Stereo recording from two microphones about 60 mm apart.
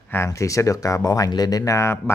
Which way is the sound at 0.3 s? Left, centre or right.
Left.